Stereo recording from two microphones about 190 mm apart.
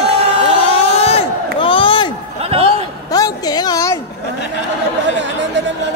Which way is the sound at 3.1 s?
20° left (ahead or behind).